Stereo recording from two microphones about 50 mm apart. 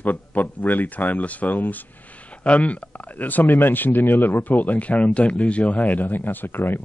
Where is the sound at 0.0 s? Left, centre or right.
Left.